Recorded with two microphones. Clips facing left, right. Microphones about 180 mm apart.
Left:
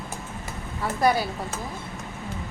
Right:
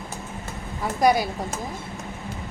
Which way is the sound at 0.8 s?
15° right (ahead or behind).